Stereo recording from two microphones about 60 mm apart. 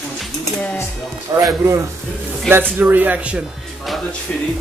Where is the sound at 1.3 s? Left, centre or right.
Right.